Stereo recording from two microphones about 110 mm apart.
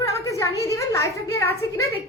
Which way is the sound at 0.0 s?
30° left (ahead or behind).